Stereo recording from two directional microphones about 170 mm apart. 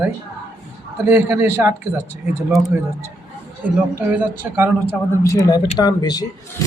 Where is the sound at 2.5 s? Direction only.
Centre (ahead or behind).